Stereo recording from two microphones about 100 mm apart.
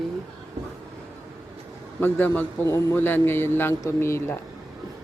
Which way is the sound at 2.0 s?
20° left (ahead or behind).